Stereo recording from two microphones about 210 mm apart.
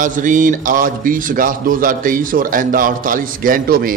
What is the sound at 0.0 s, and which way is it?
A man's voice, 40° right (ahead or behind).